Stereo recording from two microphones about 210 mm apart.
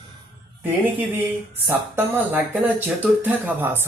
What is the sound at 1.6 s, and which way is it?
Speech, 10° right (ahead or behind).